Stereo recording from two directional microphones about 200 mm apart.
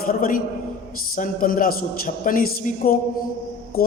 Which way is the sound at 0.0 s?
45° left (ahead or behind).